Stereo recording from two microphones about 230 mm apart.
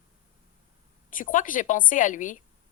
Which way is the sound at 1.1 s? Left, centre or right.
Left.